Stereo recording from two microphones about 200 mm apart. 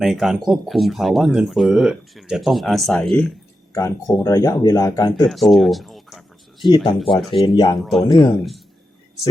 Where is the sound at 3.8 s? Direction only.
15° left (ahead or behind).